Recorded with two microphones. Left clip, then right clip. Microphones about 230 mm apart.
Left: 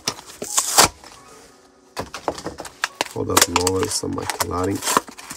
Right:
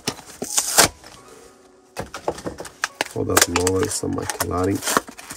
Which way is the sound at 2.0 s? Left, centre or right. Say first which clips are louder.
Left 1 dB; left.